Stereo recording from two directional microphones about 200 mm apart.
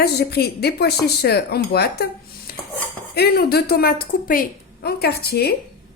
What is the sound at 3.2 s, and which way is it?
A woman's voice, 50° left (ahead or behind).